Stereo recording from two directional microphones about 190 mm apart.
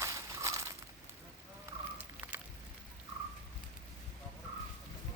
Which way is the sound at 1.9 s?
10° right (ahead or behind).